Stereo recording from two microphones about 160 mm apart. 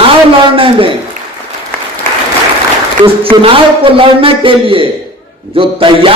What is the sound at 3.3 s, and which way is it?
A man's voice, 35° right (ahead or behind).